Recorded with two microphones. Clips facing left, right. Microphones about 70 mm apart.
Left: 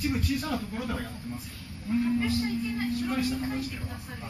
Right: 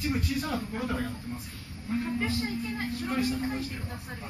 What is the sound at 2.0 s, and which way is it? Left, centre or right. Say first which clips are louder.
Speech: left 4 dB; right.